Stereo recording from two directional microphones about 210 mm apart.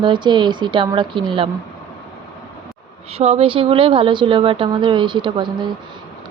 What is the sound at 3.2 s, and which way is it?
Speech, 30° right (ahead or behind).